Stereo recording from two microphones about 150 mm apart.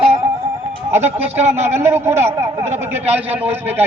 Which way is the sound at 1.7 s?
15° right (ahead or behind).